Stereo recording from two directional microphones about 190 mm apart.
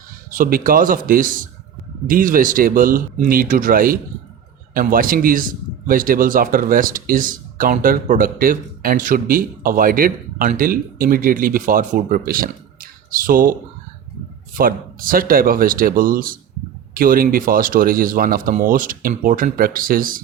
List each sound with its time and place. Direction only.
0.3 s speech: 45° right (ahead or behind)
14.6 s speech: 50° right (ahead or behind)